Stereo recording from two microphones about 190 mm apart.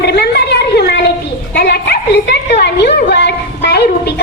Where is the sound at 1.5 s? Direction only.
60° left (ahead or behind).